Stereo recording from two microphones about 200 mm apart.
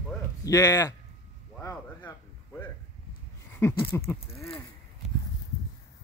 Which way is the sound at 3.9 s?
15° left (ahead or behind).